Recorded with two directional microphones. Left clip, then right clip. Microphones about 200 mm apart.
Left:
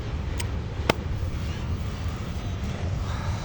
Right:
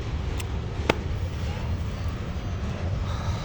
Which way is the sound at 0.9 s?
35° left (ahead or behind).